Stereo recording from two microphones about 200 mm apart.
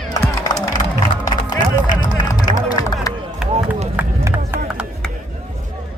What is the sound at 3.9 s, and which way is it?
Run, 10° right (ahead or behind).